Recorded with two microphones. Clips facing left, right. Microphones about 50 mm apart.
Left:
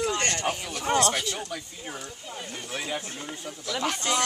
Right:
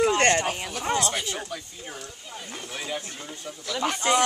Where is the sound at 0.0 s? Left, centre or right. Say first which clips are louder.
Right 7 dB; right.